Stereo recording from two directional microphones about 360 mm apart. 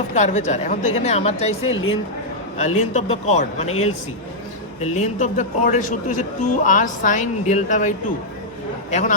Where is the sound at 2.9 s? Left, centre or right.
Centre.